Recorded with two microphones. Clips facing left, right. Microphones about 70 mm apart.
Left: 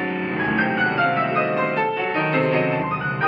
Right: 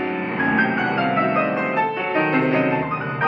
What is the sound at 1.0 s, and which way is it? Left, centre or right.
Music, centre.